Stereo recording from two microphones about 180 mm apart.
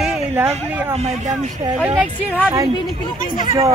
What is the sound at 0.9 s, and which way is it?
Speech, 35° right (ahead or behind).